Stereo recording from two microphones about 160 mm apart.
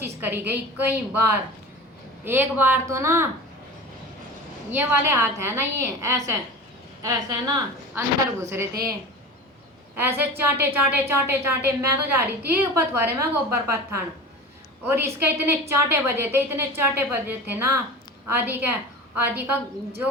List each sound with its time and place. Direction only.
0.0 s a woman's voice: 15° right (ahead or behind)
4.7 s a woman's voice: 15° right (ahead or behind)
9.9 s a woman's voice: 15° right (ahead or behind)